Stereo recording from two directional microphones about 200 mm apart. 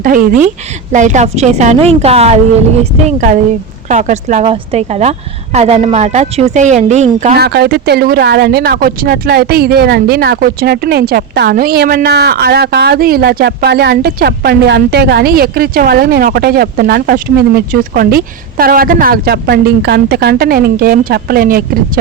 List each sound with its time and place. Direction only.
0.0 s a woman's voice: 45° right (ahead or behind)
7.3 s speech: 55° right (ahead or behind)